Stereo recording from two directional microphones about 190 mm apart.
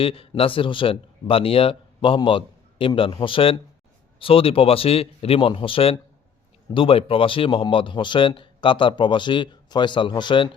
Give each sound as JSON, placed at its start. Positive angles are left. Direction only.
{"t": 0.0, "sound": "speech", "side_deg": 30}